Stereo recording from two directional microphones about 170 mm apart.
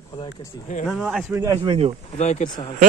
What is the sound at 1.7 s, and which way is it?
Speech, 30° right (ahead or behind).